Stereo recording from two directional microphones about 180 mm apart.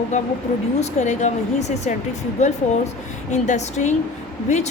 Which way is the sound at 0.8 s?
40° left (ahead or behind).